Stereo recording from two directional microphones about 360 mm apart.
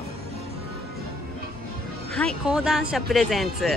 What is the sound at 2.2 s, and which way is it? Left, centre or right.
A woman's voice, centre.